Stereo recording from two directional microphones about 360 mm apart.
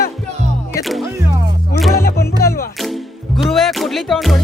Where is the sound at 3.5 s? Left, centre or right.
Centre.